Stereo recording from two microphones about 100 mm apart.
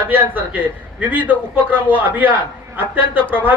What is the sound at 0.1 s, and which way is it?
A man's voice, 15° right (ahead or behind).